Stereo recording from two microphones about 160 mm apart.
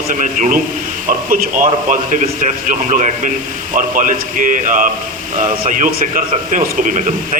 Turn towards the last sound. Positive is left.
turn(degrees=-55)  # may be behind; listen again after turning